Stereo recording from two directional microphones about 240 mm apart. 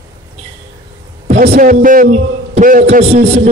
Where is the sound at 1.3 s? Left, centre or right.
Right.